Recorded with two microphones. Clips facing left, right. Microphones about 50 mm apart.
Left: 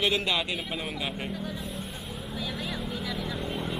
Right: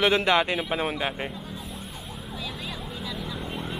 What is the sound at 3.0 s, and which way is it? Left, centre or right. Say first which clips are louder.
Vehicle: left 1 dB; centre.